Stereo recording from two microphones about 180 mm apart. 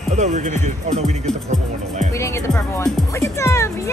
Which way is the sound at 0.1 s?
40° right (ahead or behind).